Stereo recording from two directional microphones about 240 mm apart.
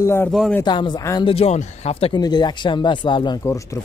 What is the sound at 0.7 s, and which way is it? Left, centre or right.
Speech, centre.